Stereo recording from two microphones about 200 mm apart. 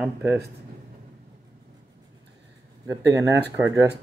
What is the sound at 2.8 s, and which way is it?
Speech, 15° right (ahead or behind).